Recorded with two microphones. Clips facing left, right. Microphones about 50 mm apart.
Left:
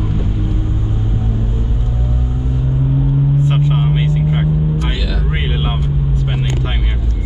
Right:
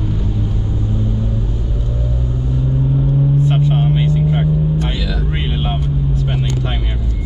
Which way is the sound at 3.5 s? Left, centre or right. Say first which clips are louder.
Even; centre.